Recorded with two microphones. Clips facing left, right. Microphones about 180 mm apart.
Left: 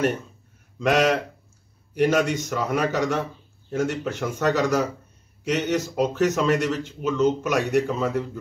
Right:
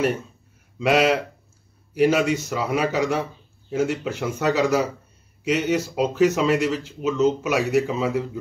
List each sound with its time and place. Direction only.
0.7 s speech: 5° right (ahead or behind)